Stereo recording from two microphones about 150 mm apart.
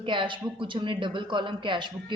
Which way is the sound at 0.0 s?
35° right (ahead or behind).